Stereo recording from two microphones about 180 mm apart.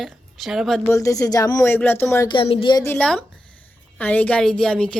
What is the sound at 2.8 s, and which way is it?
A woman's voice, 10° left (ahead or behind).